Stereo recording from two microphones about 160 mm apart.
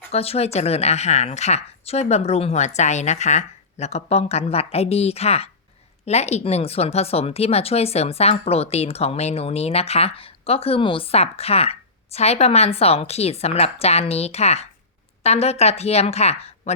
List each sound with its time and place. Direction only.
0.1 s speech: 40° left (ahead or behind)